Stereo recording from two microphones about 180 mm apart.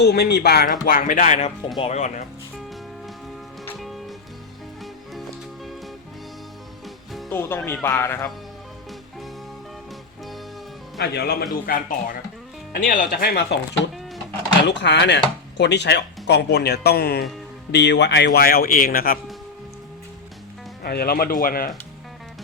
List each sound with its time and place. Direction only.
0.0 s speech: 65° left (ahead or behind); by 2.2 s 40° left (ahead or behind)
6.8 s music: centre (ahead or behind)
7.3 s speech: 15° left (ahead or behind)
11.0 s speech: 65° left (ahead or behind)
11.6 s speech: 50° left (ahead or behind)
14.7 s speech: 75° left (ahead or behind); by 17.2 s 60° left (ahead or behind)
17.7 s speech: 70° left (ahead or behind); by 19.2 s 55° left (ahead or behind)
20.8 s speech: 60° left (ahead or behind)